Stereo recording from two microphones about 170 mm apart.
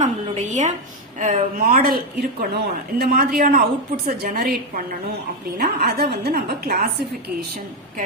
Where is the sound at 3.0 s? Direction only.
60° right (ahead or behind).